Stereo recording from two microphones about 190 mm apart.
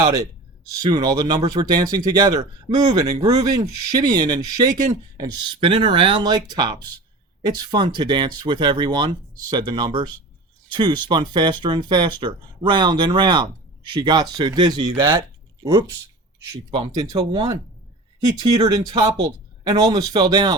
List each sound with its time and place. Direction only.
0.0 s speech: 20° right (ahead or behind)
16.5 s speech: 25° right (ahead or behind)